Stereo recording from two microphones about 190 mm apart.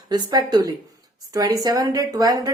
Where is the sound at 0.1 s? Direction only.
20° right (ahead or behind).